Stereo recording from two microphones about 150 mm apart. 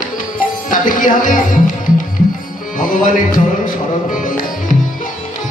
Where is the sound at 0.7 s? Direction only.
65° left (ahead or behind).